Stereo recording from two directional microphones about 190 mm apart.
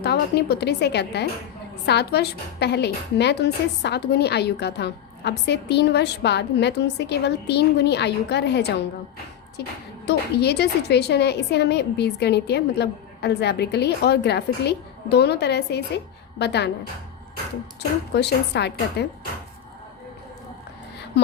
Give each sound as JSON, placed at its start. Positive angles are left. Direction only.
{"t": 0.0, "sound": "a woman's voice", "side_deg": 60}
{"t": 10.1, "sound": "a woman's voice", "side_deg": 60}
{"t": 18.1, "sound": "a woman's voice", "side_deg": 60}